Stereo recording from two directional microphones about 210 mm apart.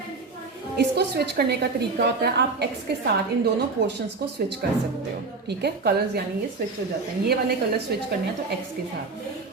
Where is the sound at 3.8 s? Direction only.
55° right (ahead or behind).